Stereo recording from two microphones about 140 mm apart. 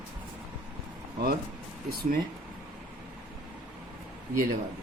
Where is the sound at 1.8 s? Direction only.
90° right.